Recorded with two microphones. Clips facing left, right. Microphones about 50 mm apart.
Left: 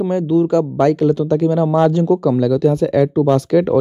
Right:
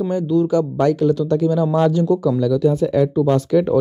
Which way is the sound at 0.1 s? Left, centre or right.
Left.